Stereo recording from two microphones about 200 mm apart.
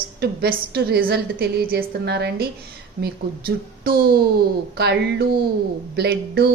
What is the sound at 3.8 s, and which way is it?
A woman's voice, 50° right (ahead or behind).